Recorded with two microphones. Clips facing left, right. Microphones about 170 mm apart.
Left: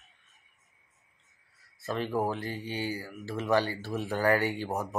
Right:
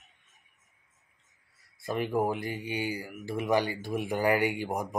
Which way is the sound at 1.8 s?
15° right (ahead or behind).